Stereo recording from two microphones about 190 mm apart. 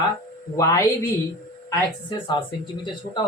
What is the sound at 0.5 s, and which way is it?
Speech, 15° left (ahead or behind).